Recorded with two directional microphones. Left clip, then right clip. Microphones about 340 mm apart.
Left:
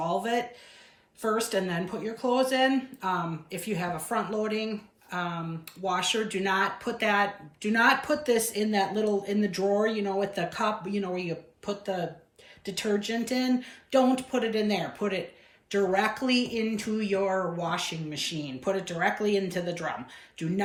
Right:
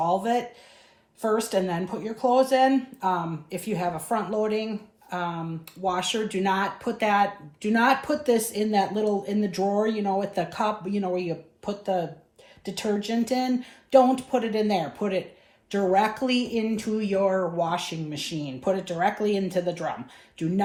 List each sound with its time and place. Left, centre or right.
0.0 s speech: centre